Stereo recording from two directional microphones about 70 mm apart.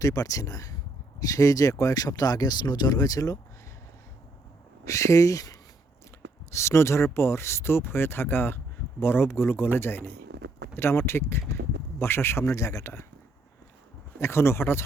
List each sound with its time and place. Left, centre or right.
0.0 s speech: left
4.9 s speech: left
6.5 s speech: left
14.2 s speech: left